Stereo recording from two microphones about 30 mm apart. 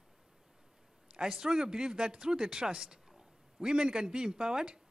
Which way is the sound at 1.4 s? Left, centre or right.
Right.